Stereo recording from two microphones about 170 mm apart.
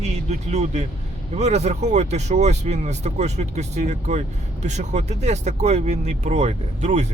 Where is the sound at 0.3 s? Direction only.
40° right (ahead or behind).